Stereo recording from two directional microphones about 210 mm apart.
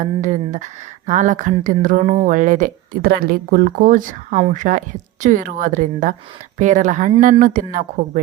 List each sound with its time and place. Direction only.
0.0 s speech: 35° right (ahead or behind)